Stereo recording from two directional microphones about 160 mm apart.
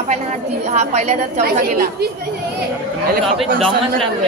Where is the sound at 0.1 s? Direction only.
45° right (ahead or behind).